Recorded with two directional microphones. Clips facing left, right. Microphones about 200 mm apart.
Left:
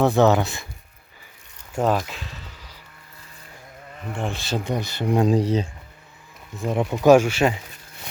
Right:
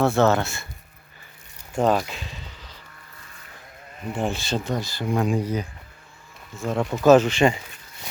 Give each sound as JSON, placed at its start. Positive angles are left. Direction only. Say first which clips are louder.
{"t": 0.0, "sound": "speech", "louder": "left 2 dB", "side_deg": 15}
{"t": 1.7, "sound": "a sound", "louder": "right 1 dB", "side_deg": 5}
{"t": 4.1, "sound": "speech", "louder": "right 3 dB", "side_deg": -5}
{"t": 4.5, "sound": "speech", "louder": "left 1 dB", "side_deg": 15}
{"t": 5.2, "sound": "speech", "louder": "left 6 dB", "side_deg": 30}
{"t": 6.6, "sound": "speech", "louder": "left 1 dB", "side_deg": 15}